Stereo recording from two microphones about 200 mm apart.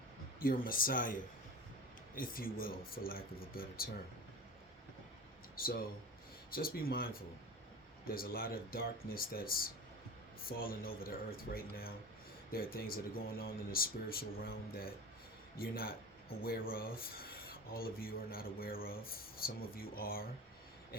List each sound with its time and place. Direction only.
0.3 s speech: 45° left (ahead or behind)
5.5 s speech: 45° left (ahead or behind)